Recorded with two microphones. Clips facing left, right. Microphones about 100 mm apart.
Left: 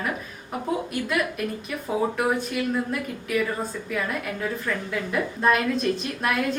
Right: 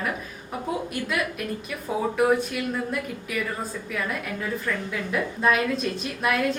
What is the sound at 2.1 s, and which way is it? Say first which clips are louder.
A woman's voice: right 3 dB; centre (ahead or behind).